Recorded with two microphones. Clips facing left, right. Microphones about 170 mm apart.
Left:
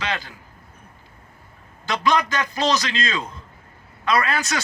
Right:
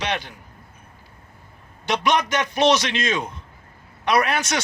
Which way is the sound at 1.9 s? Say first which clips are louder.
Even; 20° right (ahead or behind).